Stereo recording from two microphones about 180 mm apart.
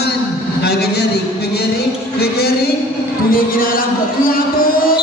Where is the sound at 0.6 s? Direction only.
65° left (ahead or behind).